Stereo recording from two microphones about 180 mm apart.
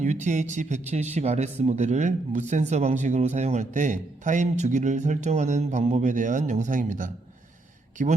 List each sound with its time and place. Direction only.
0.0 s a man's voice: 40° right (ahead or behind)